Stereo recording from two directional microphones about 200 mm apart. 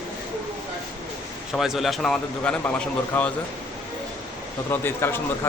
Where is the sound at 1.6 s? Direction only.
Centre (ahead or behind).